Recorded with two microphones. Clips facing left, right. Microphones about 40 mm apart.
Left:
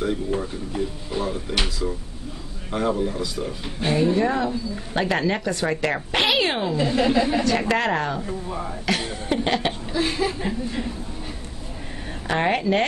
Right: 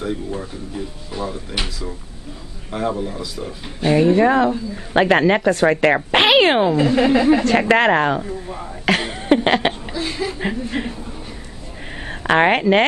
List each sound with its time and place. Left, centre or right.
0.4 s speech: centre
2.7 s speech: centre
3.9 s speech: right
6.9 s speech: right
7.4 s speech: right
8.8 s a sound: right
9.9 s speech: centre
10.4 s speech: right
12.1 s speech: right